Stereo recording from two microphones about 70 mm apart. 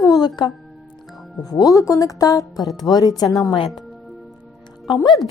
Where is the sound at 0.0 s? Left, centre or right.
Left.